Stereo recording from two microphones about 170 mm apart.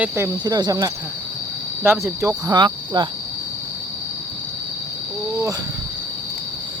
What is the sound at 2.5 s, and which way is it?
Speech, 25° right (ahead or behind).